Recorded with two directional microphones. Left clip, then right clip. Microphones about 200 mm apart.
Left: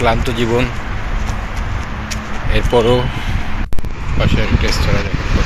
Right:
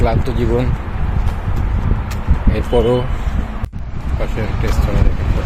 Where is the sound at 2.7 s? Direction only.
15° left (ahead or behind).